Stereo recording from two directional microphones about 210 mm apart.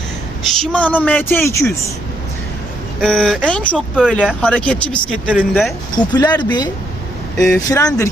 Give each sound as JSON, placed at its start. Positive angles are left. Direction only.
{"t": 0.4, "sound": "speech", "side_deg": 0}
{"t": 3.0, "sound": "speech", "side_deg": 0}
{"t": 3.9, "sound": "speech", "side_deg": -5}
{"t": 6.0, "sound": "speech", "side_deg": 20}